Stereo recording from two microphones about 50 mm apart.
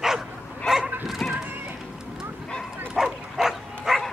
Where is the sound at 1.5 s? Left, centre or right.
Right.